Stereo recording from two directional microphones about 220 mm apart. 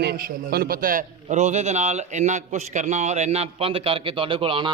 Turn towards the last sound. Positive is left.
turn(degrees=-25)  # may be behind; listen again after turning